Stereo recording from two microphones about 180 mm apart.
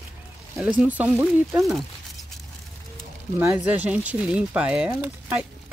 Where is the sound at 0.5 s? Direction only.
10° right (ahead or behind).